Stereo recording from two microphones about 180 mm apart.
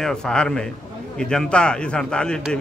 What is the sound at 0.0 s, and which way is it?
A man's voice, 5° left (ahead or behind).